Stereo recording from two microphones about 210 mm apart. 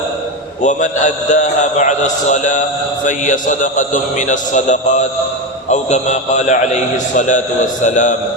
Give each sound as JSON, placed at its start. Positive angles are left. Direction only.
{"t": 0.6, "sound": "a man's voice", "side_deg": 35}